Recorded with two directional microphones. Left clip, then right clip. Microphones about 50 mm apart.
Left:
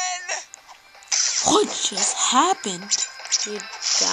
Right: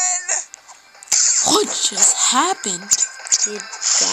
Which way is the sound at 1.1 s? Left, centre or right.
Right.